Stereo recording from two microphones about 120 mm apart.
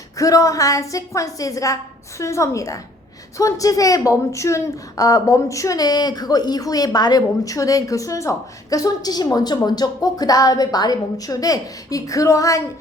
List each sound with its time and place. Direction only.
0.2 s a woman's voice: 30° left (ahead or behind)